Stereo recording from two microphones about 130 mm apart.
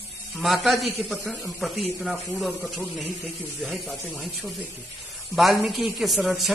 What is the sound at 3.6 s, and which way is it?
Speech, centre (ahead or behind).